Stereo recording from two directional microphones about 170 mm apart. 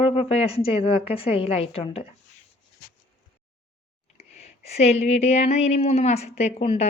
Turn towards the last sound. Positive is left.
turn(degrees=40)  # may be behind; listen again after turning